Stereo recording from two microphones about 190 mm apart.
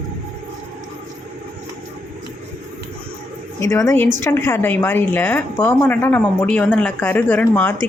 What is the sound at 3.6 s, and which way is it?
A woman's voice, 15° left (ahead or behind).